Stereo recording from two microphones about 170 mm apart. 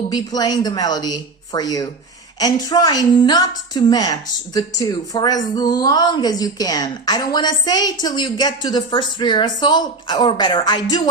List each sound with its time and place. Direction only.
0.1 s speech: 25° left (ahead or behind)